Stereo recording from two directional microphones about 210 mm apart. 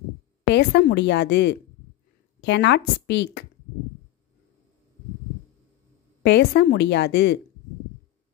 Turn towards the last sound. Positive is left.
turn(degrees=55)  # may be behind; listen again after turning